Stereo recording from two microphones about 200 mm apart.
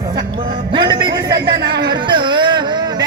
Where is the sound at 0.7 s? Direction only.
20° right (ahead or behind).